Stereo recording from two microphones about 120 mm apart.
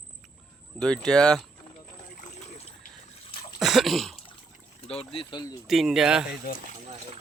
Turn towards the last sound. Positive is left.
turn(degrees=-5)  # may be behind; listen again after turning